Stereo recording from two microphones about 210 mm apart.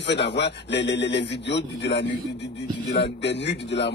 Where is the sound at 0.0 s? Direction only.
55° left (ahead or behind).